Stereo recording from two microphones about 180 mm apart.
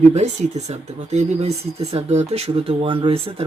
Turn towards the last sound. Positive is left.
turn(degrees=-30)  # may be behind; listen again after turning